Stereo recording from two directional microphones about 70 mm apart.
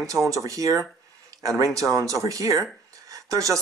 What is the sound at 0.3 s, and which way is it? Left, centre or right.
Speech, right.